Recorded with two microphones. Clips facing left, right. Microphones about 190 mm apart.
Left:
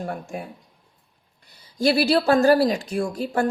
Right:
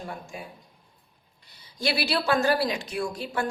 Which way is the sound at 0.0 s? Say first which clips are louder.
Left 7 dB; 55° left (ahead or behind).